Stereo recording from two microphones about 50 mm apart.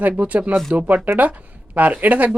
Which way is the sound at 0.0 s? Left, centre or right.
Right.